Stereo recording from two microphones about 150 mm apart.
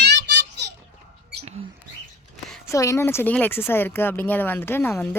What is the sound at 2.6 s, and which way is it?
Speech, 20° left (ahead or behind).